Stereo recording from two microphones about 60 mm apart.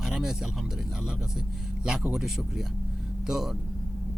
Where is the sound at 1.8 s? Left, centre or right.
Centre.